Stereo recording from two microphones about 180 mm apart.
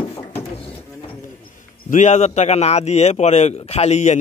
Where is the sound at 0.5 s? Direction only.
30° left (ahead or behind).